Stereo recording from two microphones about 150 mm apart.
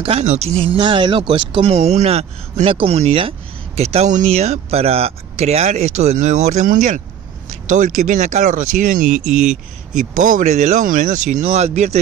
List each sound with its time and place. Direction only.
0.2 s speech: 45° right (ahead or behind); by 9.2 s 65° right (ahead or behind)
9.2 s speech: 5° right (ahead or behind)
10.1 s speech: 60° right (ahead or behind)